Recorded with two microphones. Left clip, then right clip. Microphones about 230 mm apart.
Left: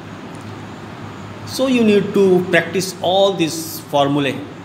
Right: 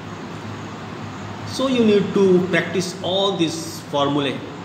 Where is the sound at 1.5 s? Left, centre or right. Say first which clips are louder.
Left 3 dB; left.